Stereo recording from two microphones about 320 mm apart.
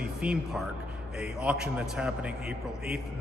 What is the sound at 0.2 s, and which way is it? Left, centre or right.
A man's voice, centre.